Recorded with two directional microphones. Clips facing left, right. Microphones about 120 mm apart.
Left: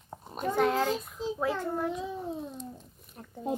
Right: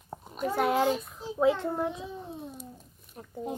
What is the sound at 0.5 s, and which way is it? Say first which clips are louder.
Speech: right 1 dB; 10° right (ahead or behind).